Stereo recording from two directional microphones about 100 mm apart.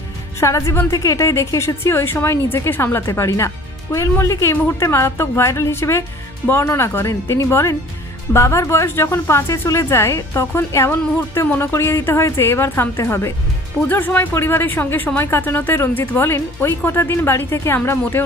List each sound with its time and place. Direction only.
0.4 s a woman's voice: 30° left (ahead or behind)